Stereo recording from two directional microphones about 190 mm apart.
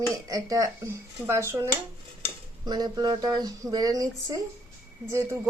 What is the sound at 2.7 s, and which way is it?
Speech, 20° right (ahead or behind).